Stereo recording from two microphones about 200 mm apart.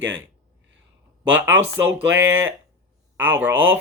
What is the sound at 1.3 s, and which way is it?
Speech, 10° right (ahead or behind).